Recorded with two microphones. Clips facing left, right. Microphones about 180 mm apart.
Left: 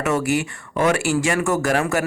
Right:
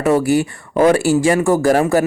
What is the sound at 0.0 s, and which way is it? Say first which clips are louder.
Speech: right 6 dB; 30° right (ahead or behind).